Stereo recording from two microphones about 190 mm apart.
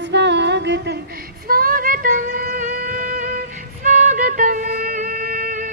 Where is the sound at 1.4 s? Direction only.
50° right (ahead or behind).